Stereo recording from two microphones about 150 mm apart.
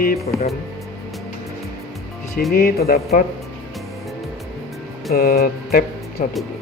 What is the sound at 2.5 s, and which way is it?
Speech, 85° left.